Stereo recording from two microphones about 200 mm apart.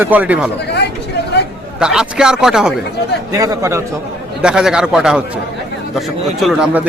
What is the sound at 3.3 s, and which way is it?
Speech, 15° right (ahead or behind).